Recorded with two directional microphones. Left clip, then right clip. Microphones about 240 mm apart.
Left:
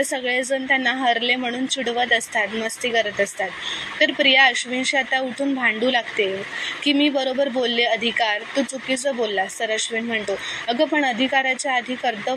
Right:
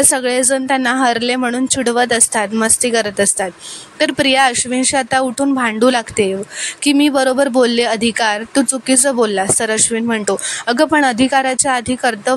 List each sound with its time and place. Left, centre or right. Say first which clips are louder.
0.1 s a woman's voice: right 7 dB; right